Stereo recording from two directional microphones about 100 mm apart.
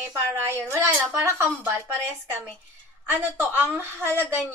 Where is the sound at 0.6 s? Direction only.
20° right (ahead or behind).